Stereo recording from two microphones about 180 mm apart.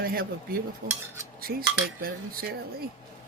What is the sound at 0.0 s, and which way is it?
Cutlery, 55° right (ahead or behind).